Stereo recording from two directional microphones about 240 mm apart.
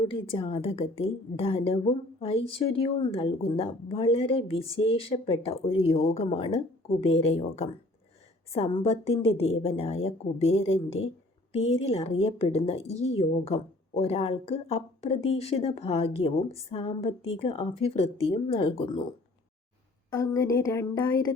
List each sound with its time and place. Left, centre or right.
0.1 s speech: left
20.1 s speech: centre